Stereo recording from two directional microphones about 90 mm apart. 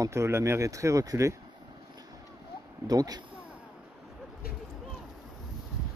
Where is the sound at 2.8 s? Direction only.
45° right (ahead or behind).